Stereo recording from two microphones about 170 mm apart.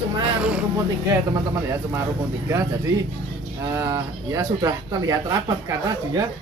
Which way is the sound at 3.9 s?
20° right (ahead or behind).